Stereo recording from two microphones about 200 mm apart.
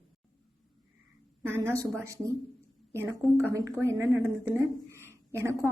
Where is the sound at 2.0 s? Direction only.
15° right (ahead or behind).